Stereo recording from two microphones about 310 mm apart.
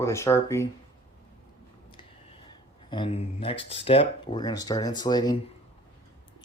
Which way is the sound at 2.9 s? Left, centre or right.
Centre.